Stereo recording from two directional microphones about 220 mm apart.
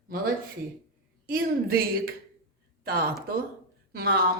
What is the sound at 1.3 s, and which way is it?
A woman's voice, 40° right (ahead or behind).